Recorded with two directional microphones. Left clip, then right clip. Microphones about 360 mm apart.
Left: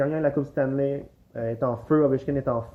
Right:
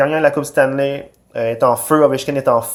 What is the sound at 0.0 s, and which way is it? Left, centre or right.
Speech, centre.